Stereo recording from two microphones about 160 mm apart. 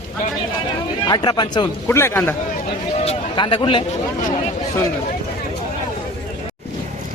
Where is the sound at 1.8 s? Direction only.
15° left (ahead or behind).